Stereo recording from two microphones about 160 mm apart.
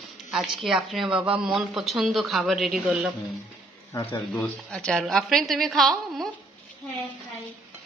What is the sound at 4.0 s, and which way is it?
Speech, 35° left (ahead or behind).